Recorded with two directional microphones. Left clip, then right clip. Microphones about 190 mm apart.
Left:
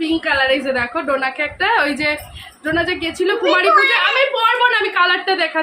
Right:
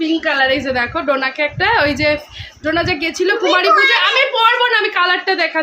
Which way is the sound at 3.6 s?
Centre (ahead or behind).